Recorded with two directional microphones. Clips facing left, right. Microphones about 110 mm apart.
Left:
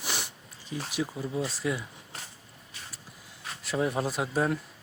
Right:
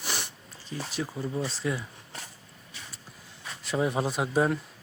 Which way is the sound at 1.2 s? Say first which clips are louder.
Right 2 dB; 5° left (ahead or behind).